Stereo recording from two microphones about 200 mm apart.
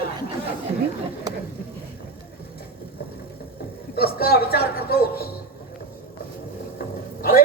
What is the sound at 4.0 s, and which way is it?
Speech, 50° left (ahead or behind).